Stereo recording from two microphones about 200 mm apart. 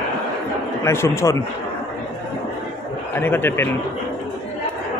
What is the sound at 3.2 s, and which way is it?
Speech, 10° left (ahead or behind).